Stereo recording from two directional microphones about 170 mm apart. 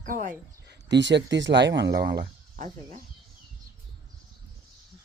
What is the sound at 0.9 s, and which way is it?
Speech, 90° right.